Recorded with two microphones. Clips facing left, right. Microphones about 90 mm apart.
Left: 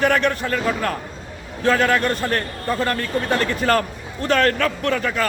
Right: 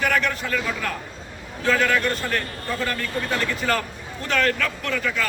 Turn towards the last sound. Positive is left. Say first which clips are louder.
# left 4 dB
turn(degrees=45)  # may be behind; listen again after turning